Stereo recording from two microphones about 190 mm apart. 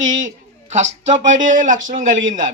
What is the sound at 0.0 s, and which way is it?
A man's voice, 40° right (ahead or behind).